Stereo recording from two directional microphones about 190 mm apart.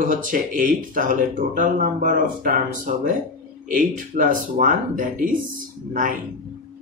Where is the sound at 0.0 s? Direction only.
45° right (ahead or behind).